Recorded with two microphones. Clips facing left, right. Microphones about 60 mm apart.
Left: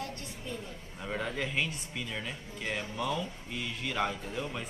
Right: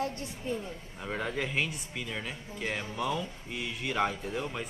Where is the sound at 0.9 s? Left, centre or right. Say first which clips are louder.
Right 1 dB; centre.